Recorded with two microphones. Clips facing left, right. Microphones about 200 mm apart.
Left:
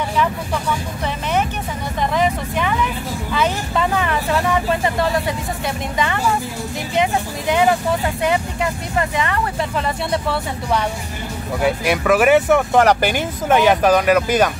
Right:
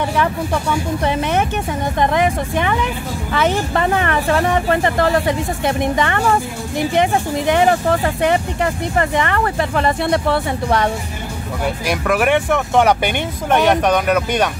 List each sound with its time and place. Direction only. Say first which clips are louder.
2.0 s speech: right 2 dB; 55° right (ahead or behind)
3.7 s speech: right 2 dB; 65° right (ahead or behind)
8.9 s speech: right 2 dB; 60° right (ahead or behind)
11.6 s speech: left 3 dB; centre (ahead or behind)